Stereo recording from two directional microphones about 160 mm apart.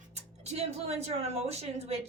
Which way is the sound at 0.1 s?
40° right (ahead or behind).